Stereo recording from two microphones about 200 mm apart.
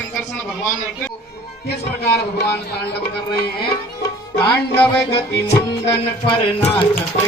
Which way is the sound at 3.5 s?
25° left (ahead or behind).